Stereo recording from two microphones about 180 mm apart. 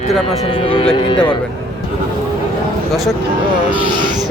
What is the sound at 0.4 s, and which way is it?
Speech, 30° left (ahead or behind).